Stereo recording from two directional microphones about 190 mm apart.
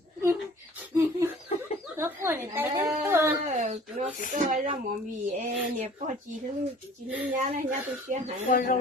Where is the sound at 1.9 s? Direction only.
15° right (ahead or behind).